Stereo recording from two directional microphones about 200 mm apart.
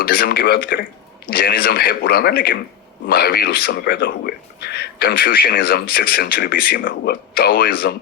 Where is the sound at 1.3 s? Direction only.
50° left (ahead or behind).